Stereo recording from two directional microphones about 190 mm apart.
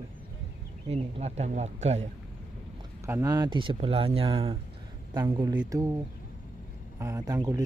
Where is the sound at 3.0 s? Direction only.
15° right (ahead or behind).